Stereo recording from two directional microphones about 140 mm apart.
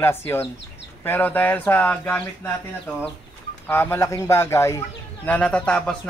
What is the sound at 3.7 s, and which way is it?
Speech, 15° left (ahead or behind).